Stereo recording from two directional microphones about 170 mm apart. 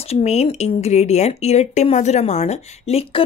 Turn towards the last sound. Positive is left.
turn(degrees=35)  # may be behind; listen again after turning